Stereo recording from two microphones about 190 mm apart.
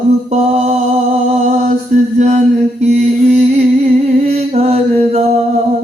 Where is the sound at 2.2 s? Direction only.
35° right (ahead or behind).